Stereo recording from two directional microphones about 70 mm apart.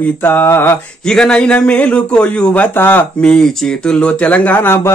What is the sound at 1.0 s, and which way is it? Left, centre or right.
A man's voice, centre.